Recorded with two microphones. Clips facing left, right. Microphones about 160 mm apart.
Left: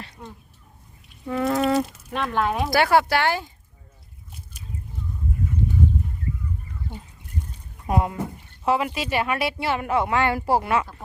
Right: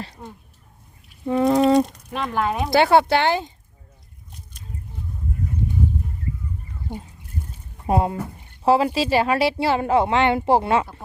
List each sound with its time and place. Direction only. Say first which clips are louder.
0.2 s a woman's voice: right 2 dB; 25° right (ahead or behind)
1.9 s speech: even; 5° left (ahead or behind)
2.6 s a woman's voice: right 4 dB; 25° right (ahead or behind)
4.3 s a sound: left 1 dB; 5° left (ahead or behind)
7.9 s a woman's voice: right 3 dB; 30° right (ahead or behind)